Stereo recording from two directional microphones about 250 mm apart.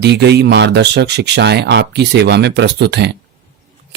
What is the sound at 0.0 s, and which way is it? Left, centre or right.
Speech, right.